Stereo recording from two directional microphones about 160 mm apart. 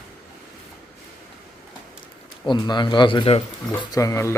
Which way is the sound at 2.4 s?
25° left (ahead or behind).